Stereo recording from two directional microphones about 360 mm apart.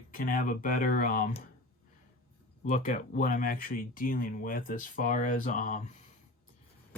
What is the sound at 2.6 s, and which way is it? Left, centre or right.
Speech, left.